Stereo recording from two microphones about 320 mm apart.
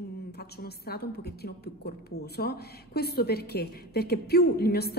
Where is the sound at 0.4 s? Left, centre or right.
Left.